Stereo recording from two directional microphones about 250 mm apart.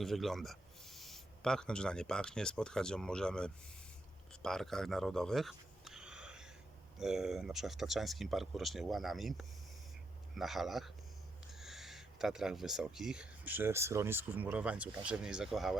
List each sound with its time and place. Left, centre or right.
0.0 s speech: centre
4.3 s a sound: centre
7.0 s speech: centre